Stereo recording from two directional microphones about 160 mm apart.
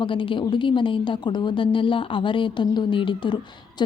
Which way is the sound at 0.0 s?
30° left (ahead or behind).